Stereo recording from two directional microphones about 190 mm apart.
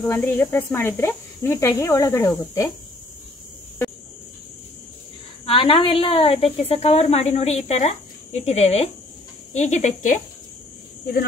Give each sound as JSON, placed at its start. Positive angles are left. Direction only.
{"t": 0.0, "sound": "speech", "side_deg": 10}
{"t": 5.4, "sound": "a woman's voice", "side_deg": 30}